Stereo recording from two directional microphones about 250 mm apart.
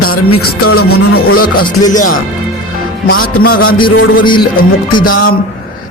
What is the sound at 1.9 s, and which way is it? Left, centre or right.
Music, left.